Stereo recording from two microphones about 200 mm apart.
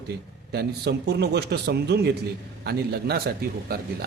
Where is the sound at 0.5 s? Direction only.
55° right (ahead or behind).